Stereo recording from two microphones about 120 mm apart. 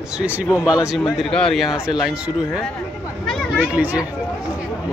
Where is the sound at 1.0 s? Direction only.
5° left (ahead or behind).